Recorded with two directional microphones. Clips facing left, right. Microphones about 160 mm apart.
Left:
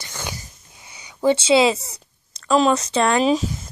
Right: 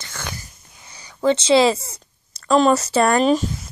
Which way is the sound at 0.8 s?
20° left (ahead or behind).